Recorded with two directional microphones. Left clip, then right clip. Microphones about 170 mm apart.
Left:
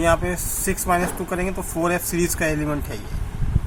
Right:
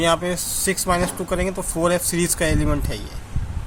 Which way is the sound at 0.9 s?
55° right (ahead or behind).